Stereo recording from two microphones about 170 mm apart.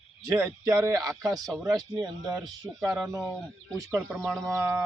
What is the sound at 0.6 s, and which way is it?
Speech, 20° right (ahead or behind).